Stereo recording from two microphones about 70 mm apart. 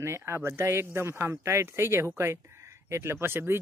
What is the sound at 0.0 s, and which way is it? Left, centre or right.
Speech, right.